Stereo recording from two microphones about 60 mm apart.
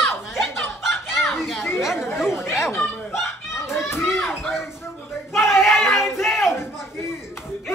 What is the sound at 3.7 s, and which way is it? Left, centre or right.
Children playing, left.